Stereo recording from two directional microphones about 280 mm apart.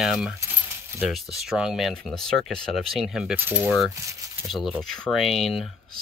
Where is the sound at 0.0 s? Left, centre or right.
Centre.